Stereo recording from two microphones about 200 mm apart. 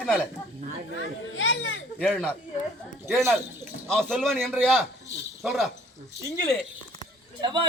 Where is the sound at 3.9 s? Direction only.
Centre (ahead or behind).